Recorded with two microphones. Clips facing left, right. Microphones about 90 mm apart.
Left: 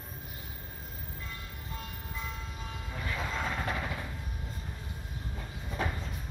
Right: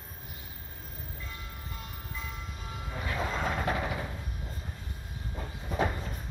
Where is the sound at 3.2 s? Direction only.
20° right (ahead or behind).